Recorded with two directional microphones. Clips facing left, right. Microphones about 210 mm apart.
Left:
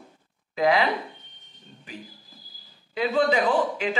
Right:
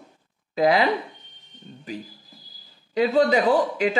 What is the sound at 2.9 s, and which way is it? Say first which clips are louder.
Speech: right 4 dB; 40° right (ahead or behind).